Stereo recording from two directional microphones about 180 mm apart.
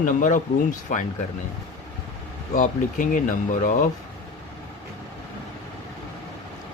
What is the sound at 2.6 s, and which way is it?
Speech, 45° left (ahead or behind).